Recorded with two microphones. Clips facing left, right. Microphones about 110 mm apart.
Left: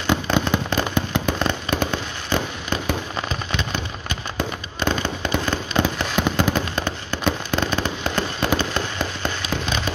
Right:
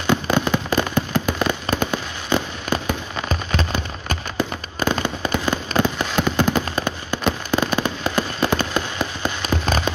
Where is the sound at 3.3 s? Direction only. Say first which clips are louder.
Right 3 dB; 40° right (ahead or behind).